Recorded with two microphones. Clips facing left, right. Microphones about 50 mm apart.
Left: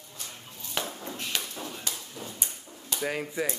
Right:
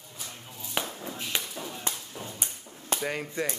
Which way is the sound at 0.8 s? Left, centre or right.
Centre.